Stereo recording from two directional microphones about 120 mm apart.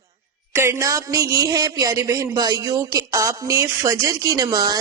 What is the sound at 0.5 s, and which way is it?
Speech, 20° right (ahead or behind).